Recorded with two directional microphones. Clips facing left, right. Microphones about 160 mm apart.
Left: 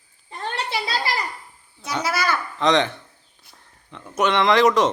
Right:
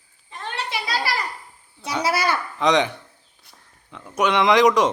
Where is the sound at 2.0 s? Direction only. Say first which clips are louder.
Right 2 dB; 30° right (ahead or behind).